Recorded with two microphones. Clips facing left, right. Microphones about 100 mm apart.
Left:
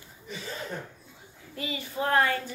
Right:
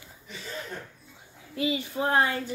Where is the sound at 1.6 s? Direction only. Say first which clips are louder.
Right 4 dB; 20° right (ahead or behind).